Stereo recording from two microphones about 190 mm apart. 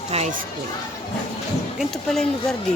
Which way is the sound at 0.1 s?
40° right (ahead or behind).